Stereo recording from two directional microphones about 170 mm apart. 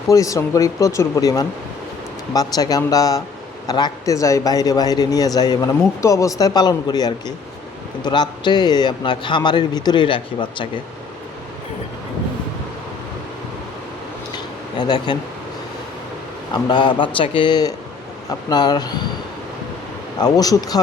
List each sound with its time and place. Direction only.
0.1 s a man's voice: 20° left (ahead or behind)
14.8 s a man's voice: 25° left (ahead or behind)
16.6 s a man's voice: 25° left (ahead or behind)
20.1 s a man's voice: 20° left (ahead or behind)